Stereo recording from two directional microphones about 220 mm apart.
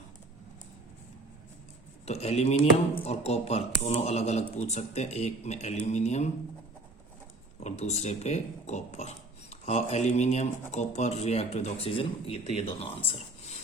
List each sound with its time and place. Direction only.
2.0 s speech: 30° left (ahead or behind)
7.6 s speech: 30° left (ahead or behind)